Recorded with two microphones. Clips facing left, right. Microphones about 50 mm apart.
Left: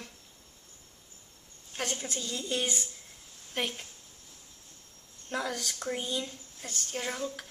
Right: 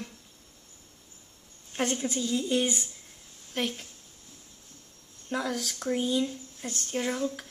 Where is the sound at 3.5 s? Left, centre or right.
Centre.